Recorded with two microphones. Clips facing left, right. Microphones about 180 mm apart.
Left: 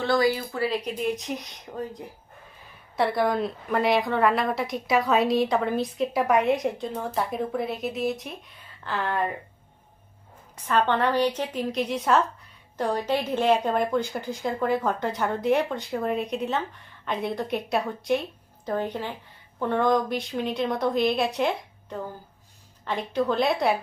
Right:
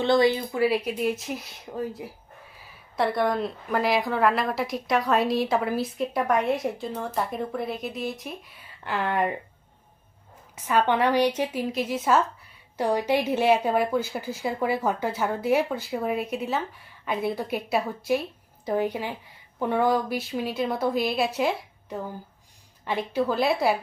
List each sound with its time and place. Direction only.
0.0 s a woman's voice: 20° right (ahead or behind); by 8.5 s centre (ahead or behind)
8.8 s speech: 15° right (ahead or behind)
10.5 s a woman's voice: 10° right (ahead or behind)